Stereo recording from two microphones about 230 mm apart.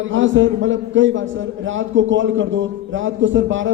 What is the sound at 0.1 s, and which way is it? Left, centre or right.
A man's voice, right.